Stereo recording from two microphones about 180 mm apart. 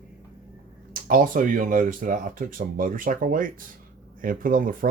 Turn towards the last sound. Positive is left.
turn(degrees=-50)  # may be behind; listen again after turning